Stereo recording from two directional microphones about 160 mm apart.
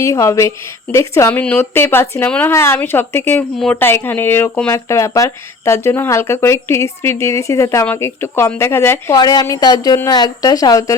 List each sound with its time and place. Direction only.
0.0 s speech: 20° left (ahead or behind)